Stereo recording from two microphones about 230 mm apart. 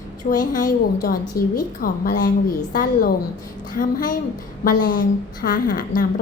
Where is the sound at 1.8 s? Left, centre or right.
Left.